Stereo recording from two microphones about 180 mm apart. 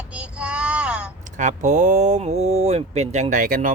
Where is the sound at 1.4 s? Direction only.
45° right (ahead or behind).